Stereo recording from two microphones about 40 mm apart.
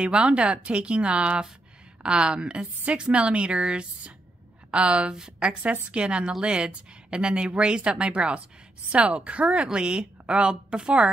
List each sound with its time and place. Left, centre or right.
0.0 s a woman's voice: right